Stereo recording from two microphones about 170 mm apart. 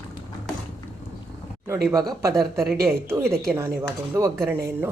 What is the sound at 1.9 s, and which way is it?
Speech, 20° right (ahead or behind).